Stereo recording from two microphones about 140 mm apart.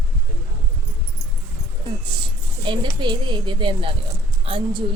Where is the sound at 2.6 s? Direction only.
35° right (ahead or behind).